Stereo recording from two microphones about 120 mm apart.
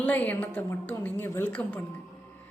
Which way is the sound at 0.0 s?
15° left (ahead or behind).